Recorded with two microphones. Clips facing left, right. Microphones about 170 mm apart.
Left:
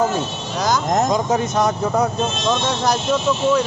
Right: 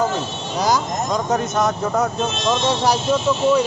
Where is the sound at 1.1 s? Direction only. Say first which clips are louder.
Left 1 dB; centre (ahead or behind).